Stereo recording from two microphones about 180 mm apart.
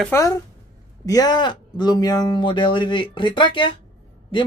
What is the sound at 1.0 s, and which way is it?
Speech, 20° left (ahead or behind).